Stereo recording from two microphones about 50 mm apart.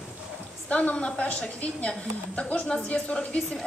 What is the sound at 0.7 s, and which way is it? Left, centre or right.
A woman's voice, left.